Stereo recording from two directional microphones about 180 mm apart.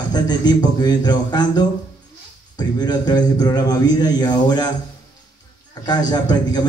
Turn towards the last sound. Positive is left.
turn(degrees=20)  # may be behind; listen again after turning